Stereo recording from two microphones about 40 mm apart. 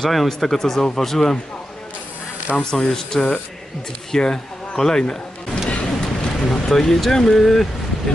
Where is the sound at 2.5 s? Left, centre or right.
Left.